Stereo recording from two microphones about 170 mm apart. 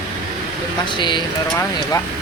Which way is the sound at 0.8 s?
30° left (ahead or behind).